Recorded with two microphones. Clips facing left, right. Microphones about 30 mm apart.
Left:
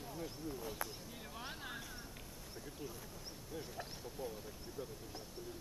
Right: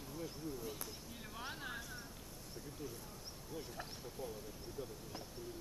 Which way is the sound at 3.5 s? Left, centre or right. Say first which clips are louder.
Even; centre.